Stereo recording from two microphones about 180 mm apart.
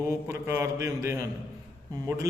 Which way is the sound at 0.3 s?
15° right (ahead or behind).